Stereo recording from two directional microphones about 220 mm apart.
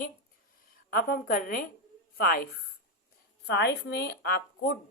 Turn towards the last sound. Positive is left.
turn(degrees=45)  # may be behind; listen again after turning